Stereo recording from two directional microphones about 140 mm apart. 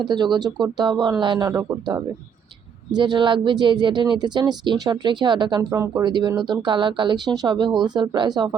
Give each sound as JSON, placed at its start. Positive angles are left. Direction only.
{"t": 0.0, "sound": "speech", "side_deg": -30}
{"t": 5.7, "sound": "speech", "side_deg": -20}